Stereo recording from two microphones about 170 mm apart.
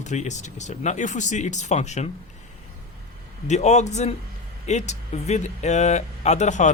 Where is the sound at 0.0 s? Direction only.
45° left (ahead or behind).